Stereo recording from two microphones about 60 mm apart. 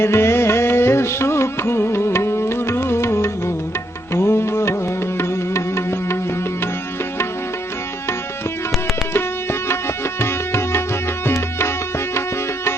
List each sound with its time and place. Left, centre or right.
0.0 s music: left
9.1 s music: left